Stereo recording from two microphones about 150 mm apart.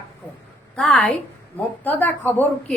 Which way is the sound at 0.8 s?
5° left (ahead or behind).